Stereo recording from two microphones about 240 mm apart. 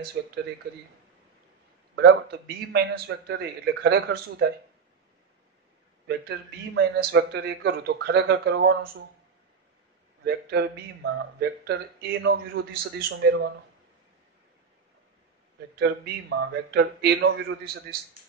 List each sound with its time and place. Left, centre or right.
0.2 s a man's voice: right
2.0 s a man's voice: right
6.0 s a man's voice: right
10.2 s a man's voice: right
15.8 s a man's voice: right